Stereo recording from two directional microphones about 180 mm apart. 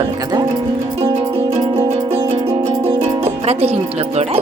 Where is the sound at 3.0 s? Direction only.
35° right (ahead or behind).